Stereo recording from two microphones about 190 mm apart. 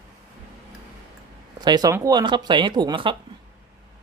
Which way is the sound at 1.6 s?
20° right (ahead or behind).